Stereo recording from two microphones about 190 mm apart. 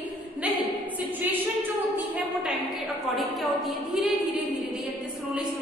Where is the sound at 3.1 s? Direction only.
Centre (ahead or behind).